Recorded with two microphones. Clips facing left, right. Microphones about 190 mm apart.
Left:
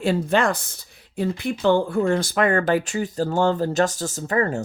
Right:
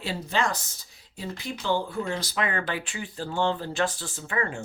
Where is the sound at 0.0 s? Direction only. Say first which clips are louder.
Left 8 dB; 55° left (ahead or behind).